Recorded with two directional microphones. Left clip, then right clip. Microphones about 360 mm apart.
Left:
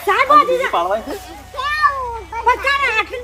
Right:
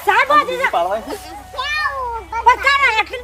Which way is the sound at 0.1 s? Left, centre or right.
Centre.